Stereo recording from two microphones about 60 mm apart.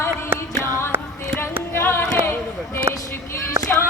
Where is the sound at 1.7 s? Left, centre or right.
Left.